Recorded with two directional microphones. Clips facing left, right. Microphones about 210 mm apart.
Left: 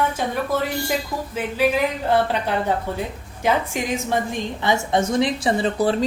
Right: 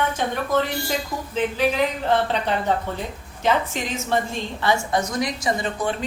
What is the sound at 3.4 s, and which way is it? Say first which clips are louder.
A woman's voice: left 1 dB; 10° left (ahead or behind).